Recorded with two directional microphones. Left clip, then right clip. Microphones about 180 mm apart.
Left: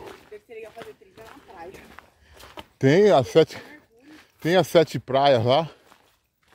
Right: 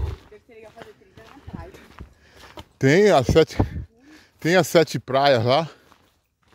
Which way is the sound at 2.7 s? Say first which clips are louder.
Right 1 dB; 30° right (ahead or behind).